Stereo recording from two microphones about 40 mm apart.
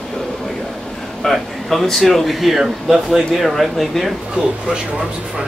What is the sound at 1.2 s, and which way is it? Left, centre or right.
Speech, centre.